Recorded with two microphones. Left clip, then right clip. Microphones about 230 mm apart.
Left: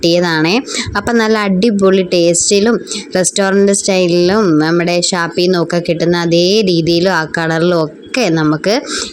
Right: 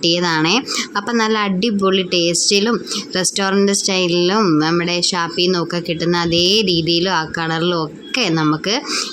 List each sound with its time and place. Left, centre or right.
0.0 s speech: centre